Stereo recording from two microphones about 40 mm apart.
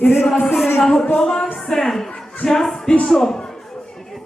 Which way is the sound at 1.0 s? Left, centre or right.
Centre.